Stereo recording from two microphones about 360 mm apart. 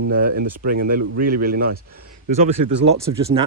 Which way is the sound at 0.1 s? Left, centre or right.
Right.